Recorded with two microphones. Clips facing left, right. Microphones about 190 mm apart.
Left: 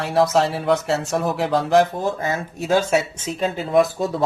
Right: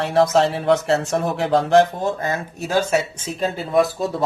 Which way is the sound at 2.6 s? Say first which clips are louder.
Left 2 dB; 10° left (ahead or behind).